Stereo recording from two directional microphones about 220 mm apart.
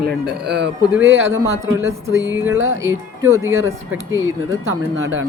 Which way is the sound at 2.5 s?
65° right (ahead or behind).